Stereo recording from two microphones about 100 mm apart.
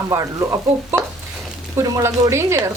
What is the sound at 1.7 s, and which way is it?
Speech, 30° right (ahead or behind).